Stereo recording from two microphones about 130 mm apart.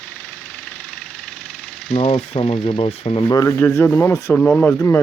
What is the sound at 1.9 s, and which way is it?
Speech, 50° left (ahead or behind).